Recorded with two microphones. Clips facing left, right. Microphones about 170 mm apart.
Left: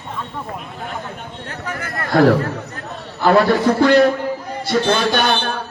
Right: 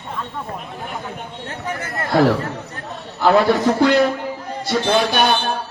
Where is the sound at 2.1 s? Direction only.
50° left (ahead or behind).